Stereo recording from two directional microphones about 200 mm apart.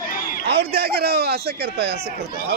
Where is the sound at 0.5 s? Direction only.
55° right (ahead or behind).